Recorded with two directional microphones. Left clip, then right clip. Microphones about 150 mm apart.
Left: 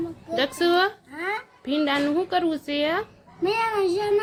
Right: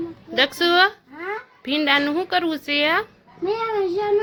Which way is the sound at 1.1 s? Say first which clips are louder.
Left 1 dB; 30° left (ahead or behind).